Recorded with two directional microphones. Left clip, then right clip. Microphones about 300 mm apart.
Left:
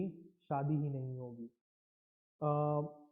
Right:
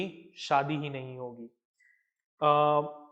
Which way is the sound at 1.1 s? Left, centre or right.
Right.